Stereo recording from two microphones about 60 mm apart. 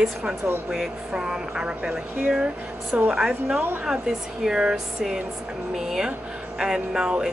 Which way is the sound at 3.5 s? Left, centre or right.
Right.